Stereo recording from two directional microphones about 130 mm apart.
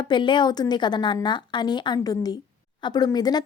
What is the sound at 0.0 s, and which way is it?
A woman's voice, 35° left (ahead or behind).